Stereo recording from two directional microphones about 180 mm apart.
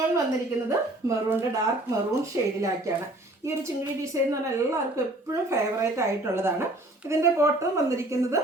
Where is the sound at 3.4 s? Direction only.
15° right (ahead or behind).